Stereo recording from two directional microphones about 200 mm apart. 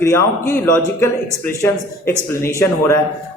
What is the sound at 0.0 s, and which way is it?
Speech, 15° left (ahead or behind).